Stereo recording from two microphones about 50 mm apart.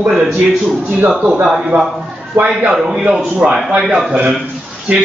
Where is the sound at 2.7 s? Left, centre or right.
Centre.